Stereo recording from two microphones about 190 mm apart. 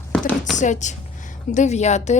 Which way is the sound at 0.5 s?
40° left (ahead or behind).